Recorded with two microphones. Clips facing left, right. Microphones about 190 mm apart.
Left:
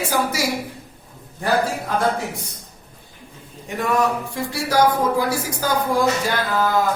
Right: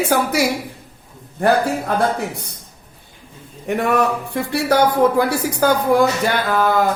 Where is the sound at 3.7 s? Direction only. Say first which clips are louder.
Right 3 dB; 60° right (ahead or behind).